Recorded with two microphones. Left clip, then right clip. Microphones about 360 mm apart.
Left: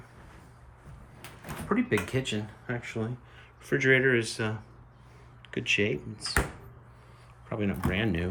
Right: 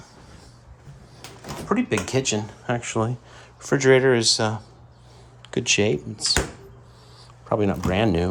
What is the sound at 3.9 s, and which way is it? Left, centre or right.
Speech, right.